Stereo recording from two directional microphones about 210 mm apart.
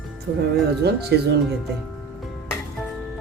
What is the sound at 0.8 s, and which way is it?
Speech, 50° right (ahead or behind).